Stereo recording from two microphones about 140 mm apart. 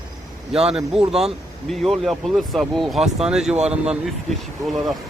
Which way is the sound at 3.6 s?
50° right (ahead or behind).